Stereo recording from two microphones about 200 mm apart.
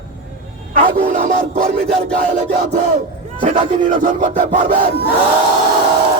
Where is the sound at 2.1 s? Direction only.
40° right (ahead or behind).